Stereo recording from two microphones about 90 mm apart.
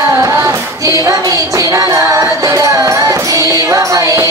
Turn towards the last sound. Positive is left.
turn(degrees=-35)  # may be behind; listen again after turning